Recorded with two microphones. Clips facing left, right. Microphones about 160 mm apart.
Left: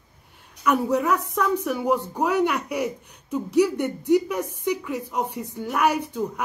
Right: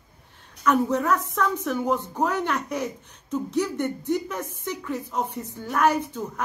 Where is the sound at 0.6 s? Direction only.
10° left (ahead or behind).